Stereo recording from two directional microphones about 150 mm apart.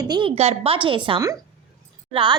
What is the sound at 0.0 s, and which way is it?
A woman's voice, 30° right (ahead or behind).